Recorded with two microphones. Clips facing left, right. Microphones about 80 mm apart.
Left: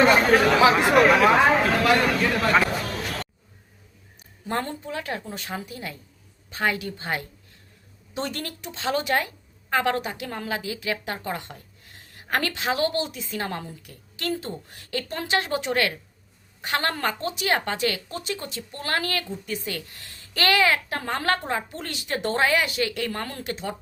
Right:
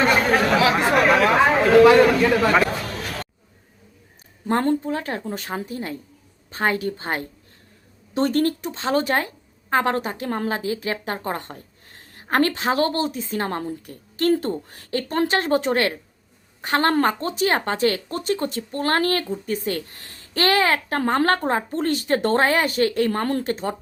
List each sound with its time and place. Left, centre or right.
0.7 s speech: centre
2.0 s a man's voice: centre
2.9 s a sound: centre
4.4 s a woman's voice: right